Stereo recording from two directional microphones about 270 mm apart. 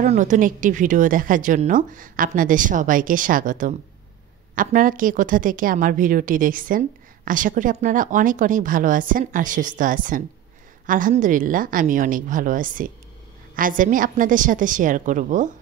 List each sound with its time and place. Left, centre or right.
0.0 s a woman's voice: right